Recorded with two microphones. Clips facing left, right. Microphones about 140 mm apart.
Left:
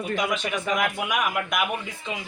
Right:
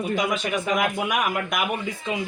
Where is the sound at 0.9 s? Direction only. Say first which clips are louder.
Right 2 dB; 40° right (ahead or behind).